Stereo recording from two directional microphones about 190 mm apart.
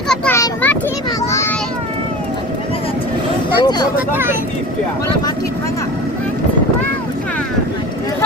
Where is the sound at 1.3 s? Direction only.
15° left (ahead or behind).